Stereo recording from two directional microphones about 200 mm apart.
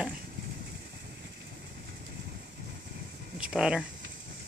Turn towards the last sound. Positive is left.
turn(degrees=-5)  # may be behind; listen again after turning